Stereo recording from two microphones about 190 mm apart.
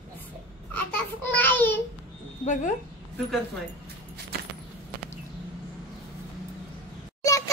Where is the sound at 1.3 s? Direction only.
10° left (ahead or behind).